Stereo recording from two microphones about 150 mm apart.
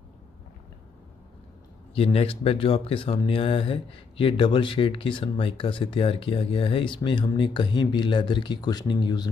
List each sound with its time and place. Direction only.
2.0 s speech: 40° left (ahead or behind)